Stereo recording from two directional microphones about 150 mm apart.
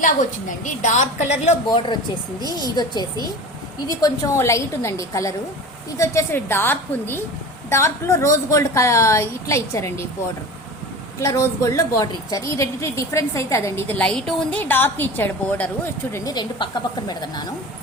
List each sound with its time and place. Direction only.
0.0 s a woman's voice: 55° left (ahead or behind)
2.6 s a woman's voice: 25° left (ahead or behind)
11.2 s a woman's voice: 20° left (ahead or behind)